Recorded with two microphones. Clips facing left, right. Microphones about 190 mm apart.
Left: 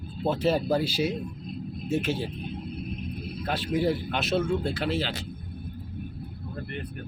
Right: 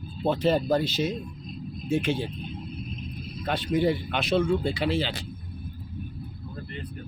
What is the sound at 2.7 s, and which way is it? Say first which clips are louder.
Rumble: left 3 dB; 65° left (ahead or behind).